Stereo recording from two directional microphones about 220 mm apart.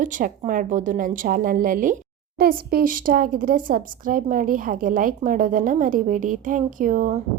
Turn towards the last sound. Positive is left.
turn(degrees=-35)  # may be behind; listen again after turning